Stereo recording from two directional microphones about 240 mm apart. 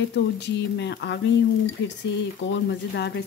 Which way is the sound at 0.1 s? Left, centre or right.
Left.